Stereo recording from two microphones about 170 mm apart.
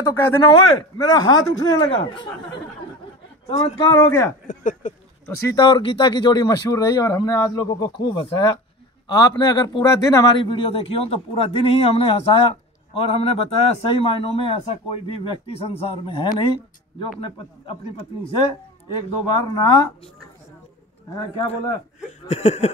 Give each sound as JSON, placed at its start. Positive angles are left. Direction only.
{"t": 0.0, "sound": "speech", "side_deg": 15}
{"t": 3.5, "sound": "a man's voice", "side_deg": 35}
{"t": 3.8, "sound": "speech", "side_deg": 20}
{"t": 4.5, "sound": "speech", "side_deg": 50}
{"t": 5.4, "sound": "speech", "side_deg": 20}
{"t": 5.7, "sound": "a man's voice", "side_deg": 30}
{"t": 19.2, "sound": "speech", "side_deg": 25}
{"t": 22.3, "sound": "a man's voice", "side_deg": 40}